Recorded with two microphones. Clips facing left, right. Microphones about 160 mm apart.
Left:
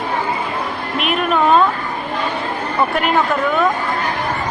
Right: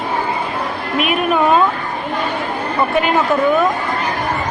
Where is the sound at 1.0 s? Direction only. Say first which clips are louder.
Right 2 dB; 5° right (ahead or behind).